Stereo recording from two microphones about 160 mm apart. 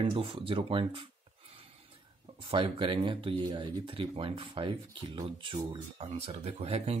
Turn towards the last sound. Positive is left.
turn(degrees=-40)  # may be behind; listen again after turning